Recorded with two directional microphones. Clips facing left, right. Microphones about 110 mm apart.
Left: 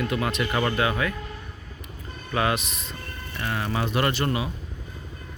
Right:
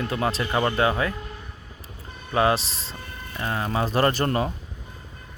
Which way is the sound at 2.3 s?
30° right (ahead or behind).